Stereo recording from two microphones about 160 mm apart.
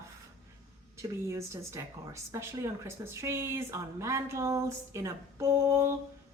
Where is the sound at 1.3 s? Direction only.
20° right (ahead or behind).